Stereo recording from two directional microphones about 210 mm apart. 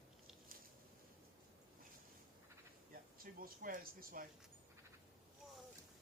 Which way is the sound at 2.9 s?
45° right (ahead or behind).